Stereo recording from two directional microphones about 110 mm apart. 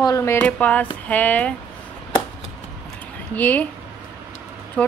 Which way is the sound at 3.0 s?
15° left (ahead or behind).